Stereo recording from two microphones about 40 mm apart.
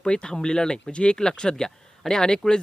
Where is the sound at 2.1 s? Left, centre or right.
Centre.